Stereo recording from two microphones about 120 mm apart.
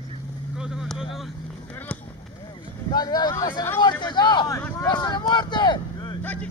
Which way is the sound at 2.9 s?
35° left (ahead or behind).